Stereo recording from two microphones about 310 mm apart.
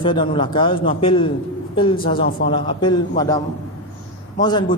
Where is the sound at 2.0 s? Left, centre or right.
Left.